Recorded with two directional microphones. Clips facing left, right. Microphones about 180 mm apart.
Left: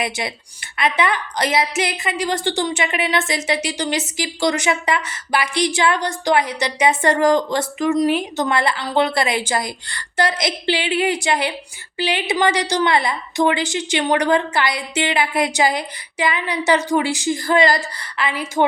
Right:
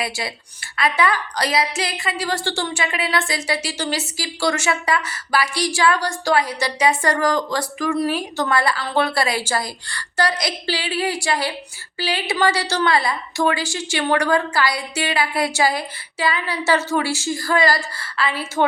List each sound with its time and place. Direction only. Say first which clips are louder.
0.0 s a woman's voice: left 2 dB; 20° left (ahead or behind)